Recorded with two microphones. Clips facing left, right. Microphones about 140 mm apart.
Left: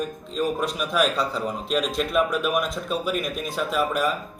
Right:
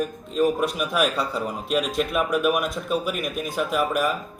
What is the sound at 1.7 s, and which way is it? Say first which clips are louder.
Speech: even; 5° right (ahead or behind).